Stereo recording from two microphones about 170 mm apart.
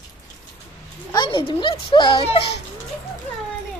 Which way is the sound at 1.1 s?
30° left (ahead or behind).